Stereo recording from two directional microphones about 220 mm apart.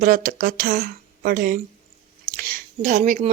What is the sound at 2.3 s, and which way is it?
Speech, 40° right (ahead or behind).